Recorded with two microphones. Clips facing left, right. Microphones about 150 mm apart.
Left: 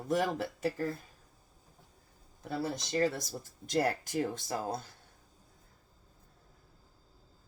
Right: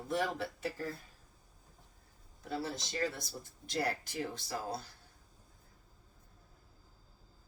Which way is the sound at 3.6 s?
45° left (ahead or behind).